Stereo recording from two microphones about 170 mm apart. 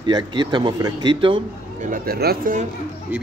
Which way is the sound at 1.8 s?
55° right (ahead or behind).